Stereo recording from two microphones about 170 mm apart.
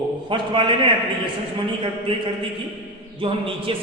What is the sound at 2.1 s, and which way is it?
A man's voice, 30° right (ahead or behind).